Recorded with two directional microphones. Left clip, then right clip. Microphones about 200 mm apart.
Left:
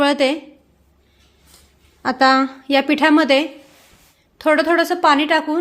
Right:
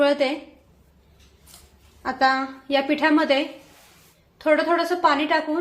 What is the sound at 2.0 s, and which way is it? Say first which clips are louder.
A woman's voice: left 6 dB; 60° left (ahead or behind).